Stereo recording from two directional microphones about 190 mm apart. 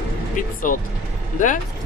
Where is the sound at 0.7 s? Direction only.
45° left (ahead or behind).